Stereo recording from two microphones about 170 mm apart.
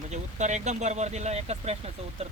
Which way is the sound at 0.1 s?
45° right (ahead or behind).